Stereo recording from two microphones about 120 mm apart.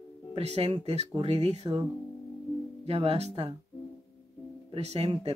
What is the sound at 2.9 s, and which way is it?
Speech, 55° right (ahead or behind).